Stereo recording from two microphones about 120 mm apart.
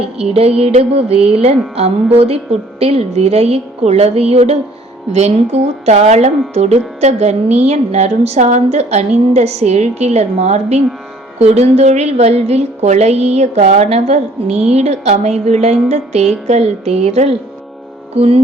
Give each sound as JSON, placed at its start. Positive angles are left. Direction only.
{"t": 0.2, "sound": "a woman's voice", "side_deg": -55}
{"t": 18.1, "sound": "music", "side_deg": -60}